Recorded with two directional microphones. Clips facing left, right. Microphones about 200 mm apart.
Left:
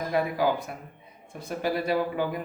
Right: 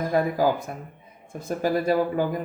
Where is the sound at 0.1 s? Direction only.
40° right (ahead or behind).